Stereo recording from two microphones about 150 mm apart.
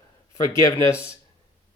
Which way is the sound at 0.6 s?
20° left (ahead or behind).